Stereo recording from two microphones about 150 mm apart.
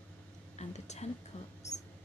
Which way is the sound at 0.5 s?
50° left (ahead or behind).